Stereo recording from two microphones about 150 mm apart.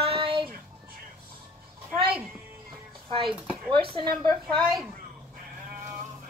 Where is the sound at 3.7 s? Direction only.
35° right (ahead or behind).